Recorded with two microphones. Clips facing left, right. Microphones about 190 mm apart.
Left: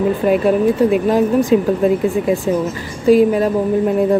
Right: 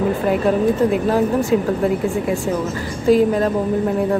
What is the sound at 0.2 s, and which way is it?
Speech, 15° left (ahead or behind).